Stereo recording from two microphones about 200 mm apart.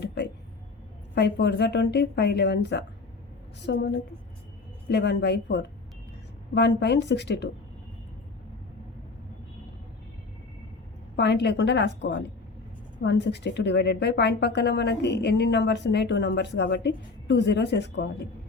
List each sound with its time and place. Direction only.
0.0 s a sound: 60° left (ahead or behind)
1.1 s speech: 60° left (ahead or behind)
11.2 s speech: 55° left (ahead or behind)